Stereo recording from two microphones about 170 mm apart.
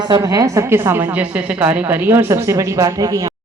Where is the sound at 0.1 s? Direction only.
20° right (ahead or behind).